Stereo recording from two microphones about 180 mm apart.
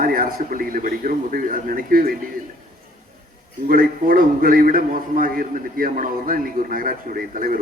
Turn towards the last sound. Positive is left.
turn(degrees=-50)  # may be behind; listen again after turning